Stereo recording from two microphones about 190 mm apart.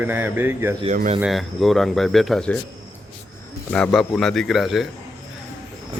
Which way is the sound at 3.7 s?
5° left (ahead or behind).